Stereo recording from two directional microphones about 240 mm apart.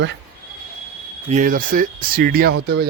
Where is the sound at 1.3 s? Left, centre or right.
Right.